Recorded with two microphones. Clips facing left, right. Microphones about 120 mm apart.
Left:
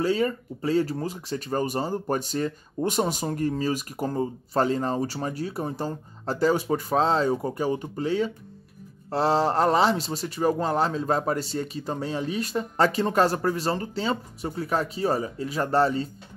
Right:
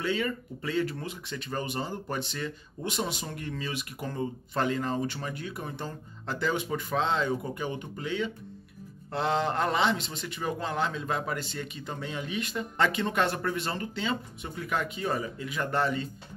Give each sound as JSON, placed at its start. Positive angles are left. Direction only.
{"t": 0.0, "sound": "speech", "side_deg": 35}